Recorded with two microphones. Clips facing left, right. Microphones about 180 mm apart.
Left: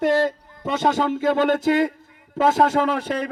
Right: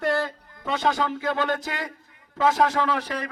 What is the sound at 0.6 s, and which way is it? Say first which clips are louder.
A man's voice: left 4 dB; 50° left (ahead or behind).